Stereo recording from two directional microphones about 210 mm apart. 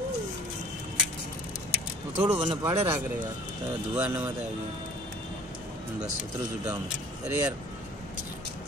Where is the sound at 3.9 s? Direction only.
10° right (ahead or behind).